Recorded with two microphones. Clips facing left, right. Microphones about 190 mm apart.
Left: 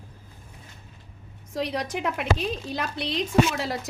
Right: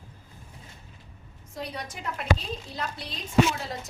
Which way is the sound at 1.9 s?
80° left.